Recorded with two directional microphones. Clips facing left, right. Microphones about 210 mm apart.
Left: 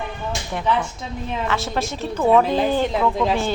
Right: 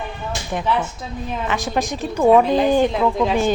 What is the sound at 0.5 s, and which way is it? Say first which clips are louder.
Speech: right 1 dB; 15° right (ahead or behind).